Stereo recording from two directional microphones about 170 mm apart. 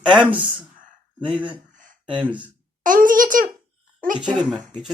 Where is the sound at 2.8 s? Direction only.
55° right (ahead or behind).